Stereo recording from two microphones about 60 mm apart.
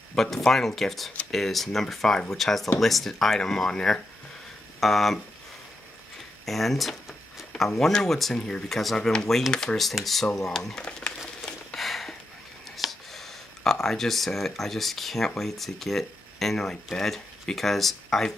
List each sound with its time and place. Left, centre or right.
0.1 s speech: centre
6.4 s speech: centre
9.8 s speech: centre
11.7 s a sound: centre
13.7 s speech: centre